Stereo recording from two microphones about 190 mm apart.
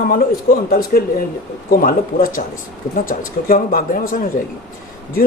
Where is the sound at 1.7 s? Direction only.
50° left (ahead or behind).